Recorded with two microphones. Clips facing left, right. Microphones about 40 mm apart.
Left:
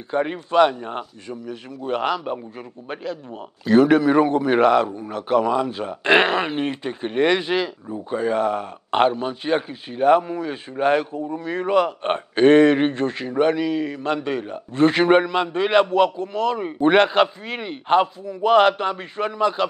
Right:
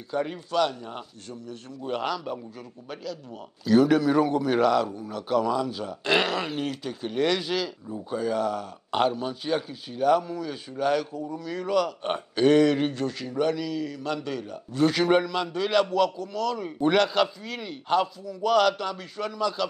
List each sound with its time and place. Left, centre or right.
0.1 s a man's voice: left